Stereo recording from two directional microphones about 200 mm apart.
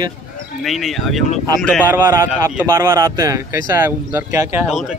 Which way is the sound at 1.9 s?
15° right (ahead or behind).